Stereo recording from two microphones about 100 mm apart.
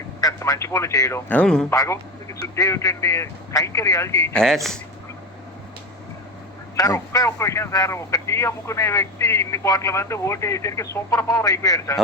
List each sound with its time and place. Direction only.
0.2 s a man's voice: 35° left (ahead or behind)
1.3 s speech: 10° left (ahead or behind)
1.7 s speech: 35° left (ahead or behind)
4.4 s speech: 5° left (ahead or behind)
6.7 s speech: 35° left (ahead or behind)